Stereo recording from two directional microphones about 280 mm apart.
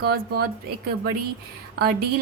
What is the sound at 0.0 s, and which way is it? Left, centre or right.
Speech, right.